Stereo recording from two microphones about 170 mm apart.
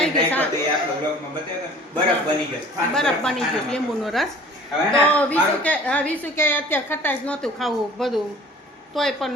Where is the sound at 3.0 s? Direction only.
5° left (ahead or behind).